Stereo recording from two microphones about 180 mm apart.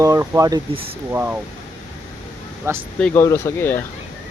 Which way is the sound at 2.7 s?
15° right (ahead or behind).